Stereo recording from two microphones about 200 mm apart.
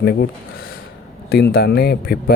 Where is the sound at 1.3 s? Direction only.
50° left (ahead or behind).